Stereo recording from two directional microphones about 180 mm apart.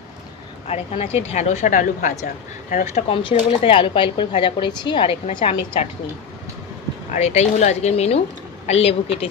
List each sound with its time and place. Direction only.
0.7 s speech: 35° left (ahead or behind)
7.1 s speech: 35° left (ahead or behind)